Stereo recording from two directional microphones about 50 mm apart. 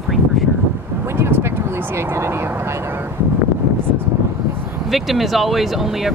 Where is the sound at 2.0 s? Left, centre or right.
Right.